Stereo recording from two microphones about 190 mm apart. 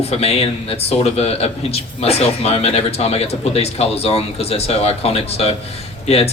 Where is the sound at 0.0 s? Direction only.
35° left (ahead or behind).